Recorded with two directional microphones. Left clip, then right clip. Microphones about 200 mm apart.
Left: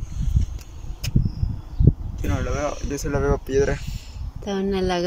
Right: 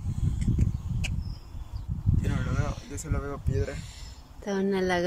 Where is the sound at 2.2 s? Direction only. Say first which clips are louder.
Left 11 dB; 40° left (ahead or behind).